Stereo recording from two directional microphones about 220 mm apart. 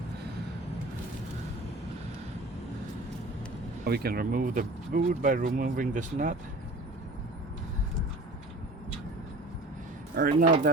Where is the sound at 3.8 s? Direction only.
45° right (ahead or behind).